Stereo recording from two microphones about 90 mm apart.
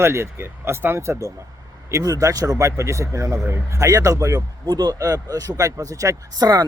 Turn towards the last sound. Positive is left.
turn(degrees=-45)  # may be behind; listen again after turning